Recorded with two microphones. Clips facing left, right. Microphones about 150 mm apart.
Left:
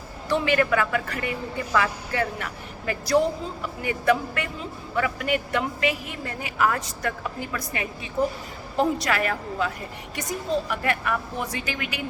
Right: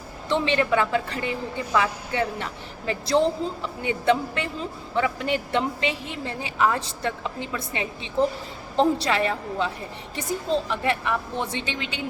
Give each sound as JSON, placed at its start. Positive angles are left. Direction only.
{"t": 0.3, "sound": "a woman's voice", "side_deg": -25}